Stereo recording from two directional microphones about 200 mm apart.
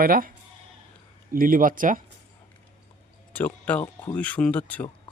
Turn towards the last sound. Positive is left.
turn(degrees=5)  # may be behind; listen again after turning